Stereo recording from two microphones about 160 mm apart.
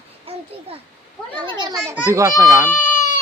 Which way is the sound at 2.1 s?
20° right (ahead or behind).